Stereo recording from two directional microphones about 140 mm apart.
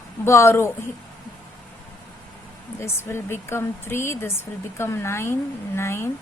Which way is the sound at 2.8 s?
15° left (ahead or behind).